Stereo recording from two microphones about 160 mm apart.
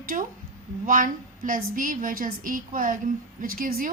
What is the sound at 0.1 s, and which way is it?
A woman's voice, 60° right (ahead or behind).